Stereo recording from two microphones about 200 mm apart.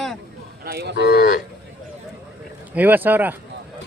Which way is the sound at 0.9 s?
55° left (ahead or behind).